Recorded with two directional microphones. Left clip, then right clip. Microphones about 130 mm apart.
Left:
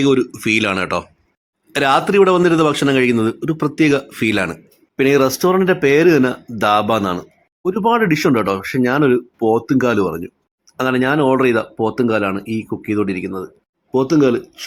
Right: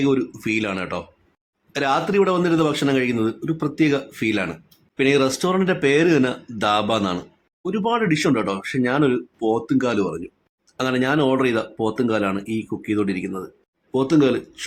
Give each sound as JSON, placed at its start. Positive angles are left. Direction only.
{"t": 0.0, "sound": "speech", "side_deg": 25}